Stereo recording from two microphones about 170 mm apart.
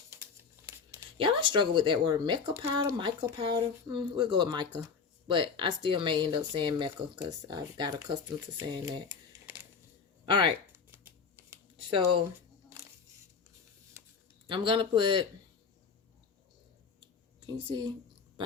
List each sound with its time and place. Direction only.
1.2 s speech: 30° right (ahead or behind)
10.2 s speech: 30° right (ahead or behind)
10.9 s shuffling cards: 10° right (ahead or behind)
11.9 s speech: 30° right (ahead or behind)
14.4 s speech: 30° right (ahead or behind)
17.0 s a sound: 25° right (ahead or behind)